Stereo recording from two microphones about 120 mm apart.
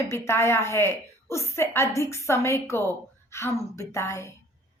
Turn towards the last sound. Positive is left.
turn(degrees=25)  # may be behind; listen again after turning